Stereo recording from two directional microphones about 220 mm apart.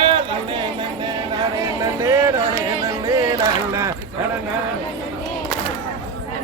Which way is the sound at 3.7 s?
15° right (ahead or behind).